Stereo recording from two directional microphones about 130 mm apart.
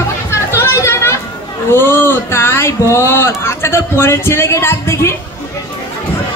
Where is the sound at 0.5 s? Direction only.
20° left (ahead or behind).